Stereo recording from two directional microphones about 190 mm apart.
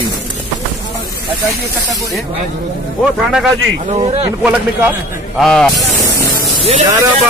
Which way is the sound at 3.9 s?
30° right (ahead or behind).